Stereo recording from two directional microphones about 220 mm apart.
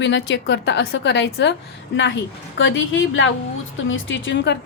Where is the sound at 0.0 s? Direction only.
55° left (ahead or behind).